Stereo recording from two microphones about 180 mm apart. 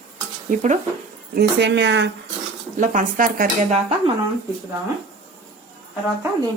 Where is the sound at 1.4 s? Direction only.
70° right (ahead or behind).